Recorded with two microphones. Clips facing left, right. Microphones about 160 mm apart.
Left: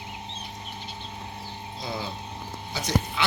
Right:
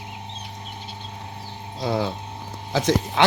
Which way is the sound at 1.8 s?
80° right.